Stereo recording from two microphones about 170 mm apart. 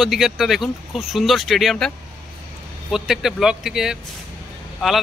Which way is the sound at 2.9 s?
Centre (ahead or behind).